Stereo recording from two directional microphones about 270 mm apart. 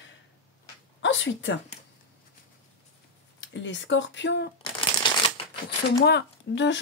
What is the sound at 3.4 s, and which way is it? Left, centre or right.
Speech, left.